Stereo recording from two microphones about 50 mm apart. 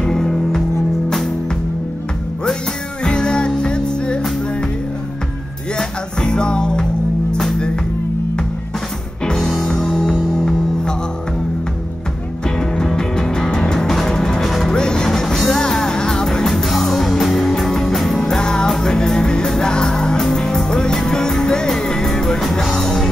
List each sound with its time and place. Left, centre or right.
0.0 s music: centre
3.0 s music: centre
5.8 s music: centre
9.2 s music: centre
12.4 s music: centre
14.8 s music: centre